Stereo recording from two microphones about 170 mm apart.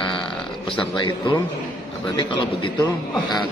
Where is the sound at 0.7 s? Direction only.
25° left (ahead or behind).